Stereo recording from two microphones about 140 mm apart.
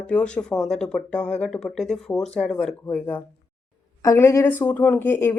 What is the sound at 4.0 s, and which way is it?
Speech, 20° left (ahead or behind).